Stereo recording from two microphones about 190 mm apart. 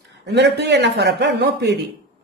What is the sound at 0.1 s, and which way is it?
Speech, 65° right (ahead or behind).